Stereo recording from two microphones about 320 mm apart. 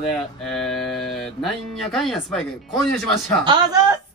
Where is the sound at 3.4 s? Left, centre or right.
Centre.